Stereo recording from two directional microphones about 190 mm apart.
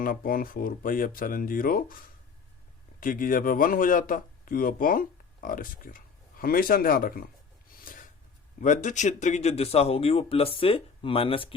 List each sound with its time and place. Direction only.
0.0 s speech: 50° left (ahead or behind)
7.9 s a sound: 45° left (ahead or behind)
8.6 s speech: 40° left (ahead or behind)